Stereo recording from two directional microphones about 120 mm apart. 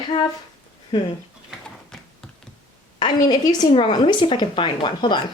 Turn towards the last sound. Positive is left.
turn(degrees=40)  # may be behind; listen again after turning